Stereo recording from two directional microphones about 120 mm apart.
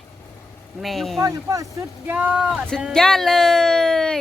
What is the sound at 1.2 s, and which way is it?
Speech, 30° right (ahead or behind).